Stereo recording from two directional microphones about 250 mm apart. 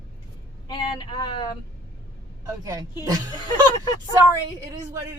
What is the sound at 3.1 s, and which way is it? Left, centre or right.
Speech, centre.